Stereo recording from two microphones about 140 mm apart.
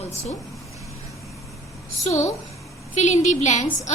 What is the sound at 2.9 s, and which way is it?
Speech, 55° left (ahead or behind).